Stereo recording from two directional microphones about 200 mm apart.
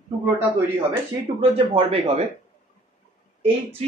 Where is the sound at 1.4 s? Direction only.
30° right (ahead or behind).